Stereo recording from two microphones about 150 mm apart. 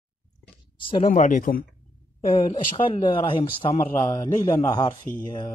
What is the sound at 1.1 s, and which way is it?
Speech, 60° left (ahead or behind).